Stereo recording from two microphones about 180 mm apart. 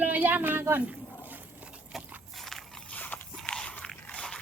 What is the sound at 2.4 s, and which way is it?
Biting, centre (ahead or behind).